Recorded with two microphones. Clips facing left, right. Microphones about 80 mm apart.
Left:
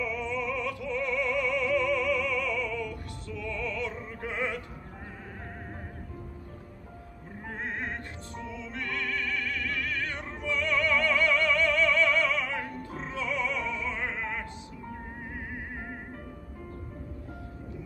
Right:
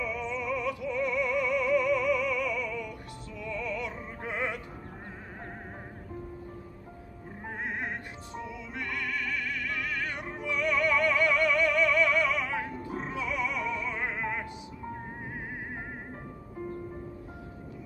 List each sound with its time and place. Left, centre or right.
0.0 s music: right
7.4 s music: centre